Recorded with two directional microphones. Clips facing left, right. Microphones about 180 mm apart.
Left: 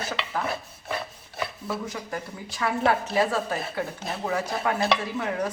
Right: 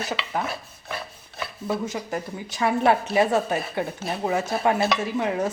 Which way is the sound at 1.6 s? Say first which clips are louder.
Right 10 dB; 25° right (ahead or behind).